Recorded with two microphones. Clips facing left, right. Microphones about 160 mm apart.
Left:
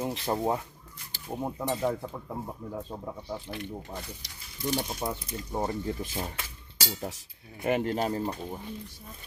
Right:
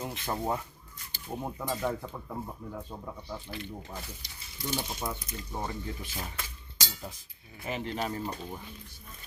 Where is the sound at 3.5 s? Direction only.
55° left (ahead or behind).